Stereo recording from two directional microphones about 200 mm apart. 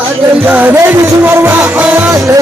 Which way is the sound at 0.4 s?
10° right (ahead or behind).